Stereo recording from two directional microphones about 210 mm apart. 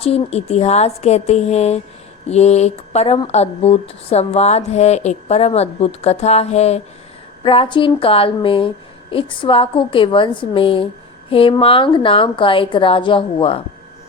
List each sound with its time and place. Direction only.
0.0 s a woman's voice: 30° left (ahead or behind)